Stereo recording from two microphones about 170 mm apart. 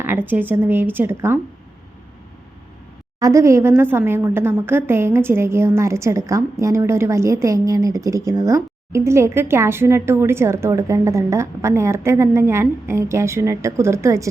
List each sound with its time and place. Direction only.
0.0 s a woman's voice: 10° right (ahead or behind)
3.2 s a woman's voice: 20° right (ahead or behind)